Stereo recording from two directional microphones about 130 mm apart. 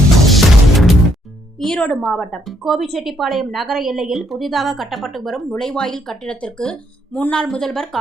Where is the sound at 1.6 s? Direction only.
5° left (ahead or behind).